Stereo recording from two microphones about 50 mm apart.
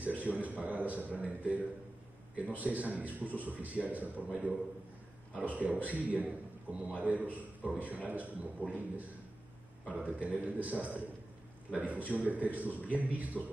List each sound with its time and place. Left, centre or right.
0.0 s a man's voice: right
5.4 s a man's voice: right
10.0 s a man's voice: right